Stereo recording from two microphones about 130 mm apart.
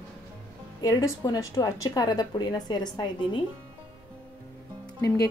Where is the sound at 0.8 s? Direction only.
30° left (ahead or behind).